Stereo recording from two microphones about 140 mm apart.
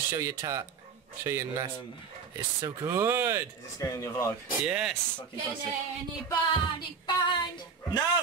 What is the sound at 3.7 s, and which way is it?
Speech, 25° left (ahead or behind).